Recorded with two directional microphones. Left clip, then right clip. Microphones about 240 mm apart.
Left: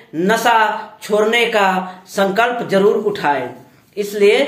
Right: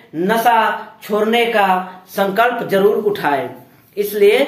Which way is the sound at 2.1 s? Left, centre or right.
Centre.